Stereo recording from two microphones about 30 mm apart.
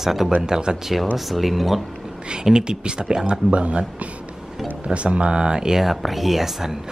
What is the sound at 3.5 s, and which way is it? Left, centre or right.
Speech, right.